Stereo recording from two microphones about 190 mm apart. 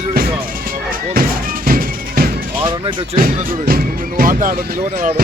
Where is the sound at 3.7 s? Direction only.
50° right (ahead or behind).